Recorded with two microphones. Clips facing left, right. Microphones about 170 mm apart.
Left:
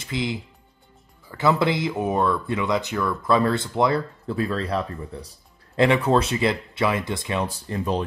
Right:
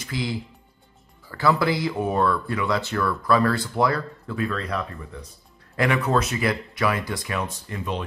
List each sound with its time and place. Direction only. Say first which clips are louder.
0.0 s speech: left 1 dB; 20° left (ahead or behind)